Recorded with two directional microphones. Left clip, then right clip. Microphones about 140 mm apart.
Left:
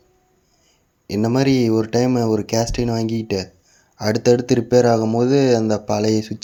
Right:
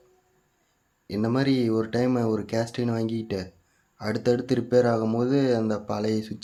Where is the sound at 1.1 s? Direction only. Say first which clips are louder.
Left 7 dB; 40° left (ahead or behind).